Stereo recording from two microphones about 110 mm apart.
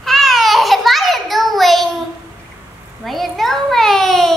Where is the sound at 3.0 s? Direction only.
Centre (ahead or behind).